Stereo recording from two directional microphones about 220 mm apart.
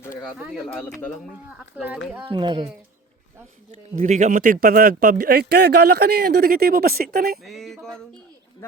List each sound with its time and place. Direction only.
0.2 s speech: 5° right (ahead or behind)
1.7 s speech: 5° right (ahead or behind)
2.2 s speech: 20° right (ahead or behind)
3.7 s speech: 35° right (ahead or behind)
7.4 s male singing: centre (ahead or behind)